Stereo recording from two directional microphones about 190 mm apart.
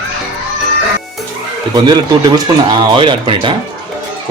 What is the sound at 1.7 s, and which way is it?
Speech, 20° right (ahead or behind).